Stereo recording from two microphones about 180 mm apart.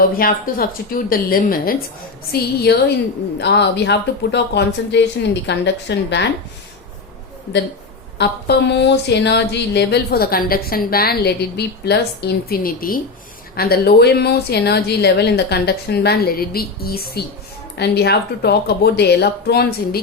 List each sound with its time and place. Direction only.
0.0 s speech: 55° left (ahead or behind)
3.3 s speech: 70° left (ahead or behind)
8.2 s speech: 70° left (ahead or behind)